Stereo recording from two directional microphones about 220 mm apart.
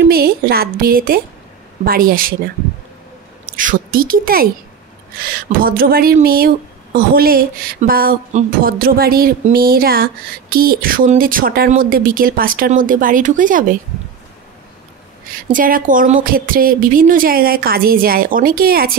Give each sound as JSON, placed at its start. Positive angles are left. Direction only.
{"t": 0.1, "sound": "speech", "side_deg": -45}
{"t": 3.4, "sound": "a woman's voice", "side_deg": -40}
{"t": 15.5, "sound": "speech", "side_deg": -40}